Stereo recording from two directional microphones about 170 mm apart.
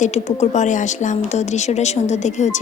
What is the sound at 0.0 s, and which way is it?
A woman's voice, 40° left (ahead or behind).